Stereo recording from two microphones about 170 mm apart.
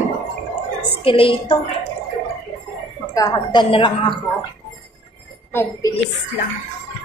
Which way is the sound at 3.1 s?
25° left (ahead or behind).